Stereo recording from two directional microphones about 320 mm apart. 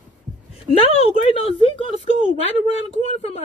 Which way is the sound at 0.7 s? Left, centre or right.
Centre.